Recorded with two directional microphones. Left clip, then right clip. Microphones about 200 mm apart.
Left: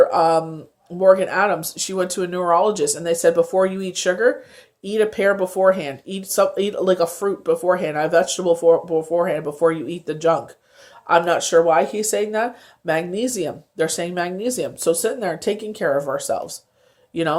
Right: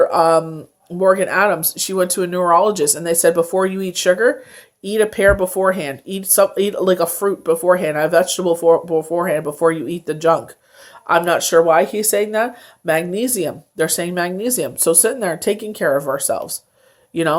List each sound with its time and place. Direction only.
0.0 s speech: 20° right (ahead or behind)